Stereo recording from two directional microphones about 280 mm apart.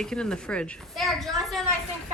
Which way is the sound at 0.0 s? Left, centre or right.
Centre.